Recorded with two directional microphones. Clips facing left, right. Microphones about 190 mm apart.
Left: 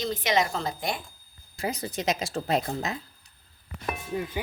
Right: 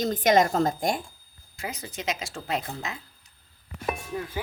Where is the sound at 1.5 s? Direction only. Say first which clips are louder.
Left 5 dB; 35° left (ahead or behind).